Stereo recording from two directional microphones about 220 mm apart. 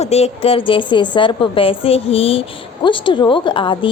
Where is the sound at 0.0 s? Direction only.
30° left (ahead or behind).